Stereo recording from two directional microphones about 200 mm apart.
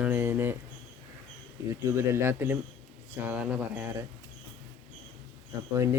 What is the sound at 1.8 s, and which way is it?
Speech, 15° right (ahead or behind).